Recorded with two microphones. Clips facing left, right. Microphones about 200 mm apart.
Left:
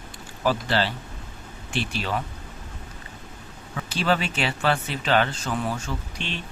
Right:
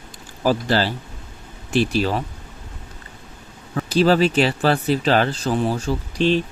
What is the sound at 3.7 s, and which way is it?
Speech, 40° right (ahead or behind).